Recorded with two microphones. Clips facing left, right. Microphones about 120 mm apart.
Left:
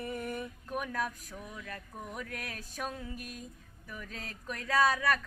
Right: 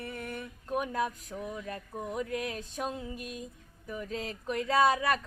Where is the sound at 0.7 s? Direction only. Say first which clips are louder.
Right 5 dB; 25° right (ahead or behind).